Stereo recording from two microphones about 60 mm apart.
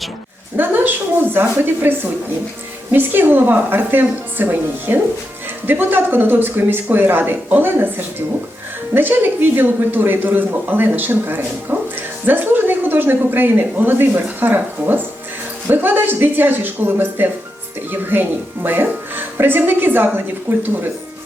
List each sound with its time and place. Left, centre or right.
0.5 s speech: right